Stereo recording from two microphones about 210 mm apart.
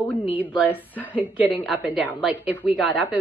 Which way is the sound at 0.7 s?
10° left (ahead or behind).